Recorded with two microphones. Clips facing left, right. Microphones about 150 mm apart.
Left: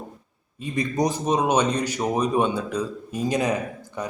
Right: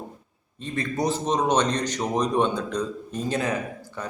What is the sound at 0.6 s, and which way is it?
A man's voice, 15° left (ahead or behind).